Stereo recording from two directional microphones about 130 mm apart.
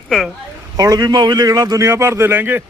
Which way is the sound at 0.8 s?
30° right (ahead or behind).